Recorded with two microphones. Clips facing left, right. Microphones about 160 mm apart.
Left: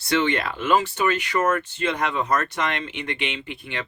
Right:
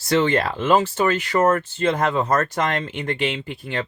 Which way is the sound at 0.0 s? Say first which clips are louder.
Right 4 dB; 35° right (ahead or behind).